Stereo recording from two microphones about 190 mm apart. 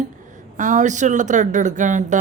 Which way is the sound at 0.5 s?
40° right (ahead or behind).